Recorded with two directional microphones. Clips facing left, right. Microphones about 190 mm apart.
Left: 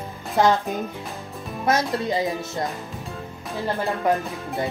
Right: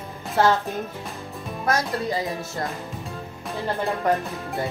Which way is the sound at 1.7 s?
25° left (ahead or behind).